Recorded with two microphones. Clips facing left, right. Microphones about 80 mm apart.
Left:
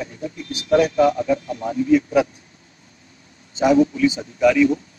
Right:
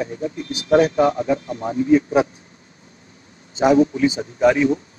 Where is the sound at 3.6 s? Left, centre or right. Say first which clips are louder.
Right 1 dB; right.